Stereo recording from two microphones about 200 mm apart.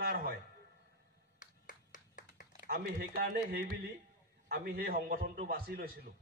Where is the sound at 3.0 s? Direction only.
55° right (ahead or behind).